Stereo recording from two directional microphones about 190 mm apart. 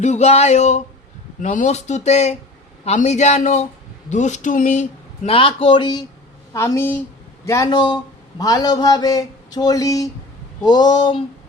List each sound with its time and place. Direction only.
0.0 s a woman's voice: 35° left (ahead or behind)